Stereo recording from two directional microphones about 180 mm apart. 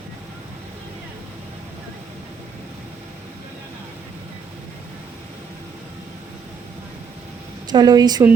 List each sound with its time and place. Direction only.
7.7 s speech: 20° right (ahead or behind)